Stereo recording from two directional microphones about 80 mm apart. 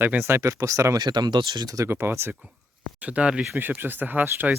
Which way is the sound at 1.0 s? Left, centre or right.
Right.